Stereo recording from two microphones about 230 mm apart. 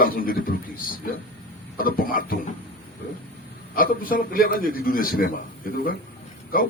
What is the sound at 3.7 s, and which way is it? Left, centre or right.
A man's voice, left.